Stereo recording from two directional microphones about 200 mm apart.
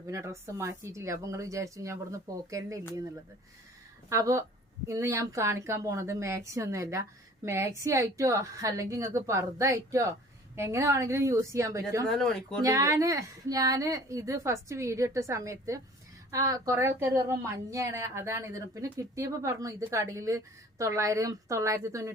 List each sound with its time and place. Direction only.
0.1 s a woman's voice: 15° right (ahead or behind)
4.1 s a woman's voice: 15° right (ahead or behind)
12.0 s speech: centre (ahead or behind)
12.6 s a woman's voice: 15° right (ahead or behind)